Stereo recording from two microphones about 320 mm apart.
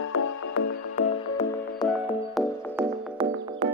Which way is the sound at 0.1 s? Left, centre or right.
Left.